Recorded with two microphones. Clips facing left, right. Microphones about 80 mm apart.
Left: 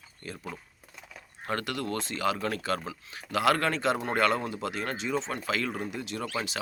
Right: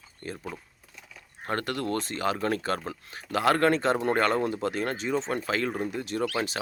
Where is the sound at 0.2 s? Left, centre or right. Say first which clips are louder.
Right 4 dB; right.